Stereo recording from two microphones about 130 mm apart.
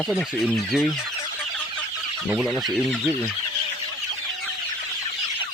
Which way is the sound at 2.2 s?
5° right (ahead or behind).